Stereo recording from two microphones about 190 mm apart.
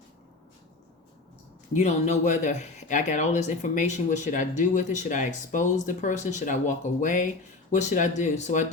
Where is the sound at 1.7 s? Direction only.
40° left (ahead or behind).